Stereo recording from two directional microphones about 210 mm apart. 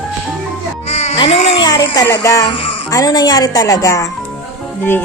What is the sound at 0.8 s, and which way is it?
Baby cry, 30° left (ahead or behind).